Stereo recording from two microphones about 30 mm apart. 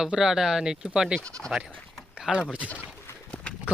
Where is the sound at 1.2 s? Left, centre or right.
Left.